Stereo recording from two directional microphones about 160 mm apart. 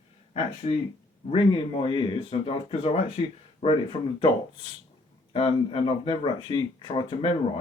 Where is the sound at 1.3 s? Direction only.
30° left (ahead or behind).